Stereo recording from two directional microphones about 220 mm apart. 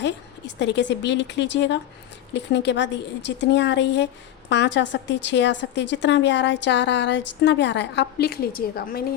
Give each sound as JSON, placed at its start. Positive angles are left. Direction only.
{"t": 0.0, "sound": "a woman's voice", "side_deg": 55}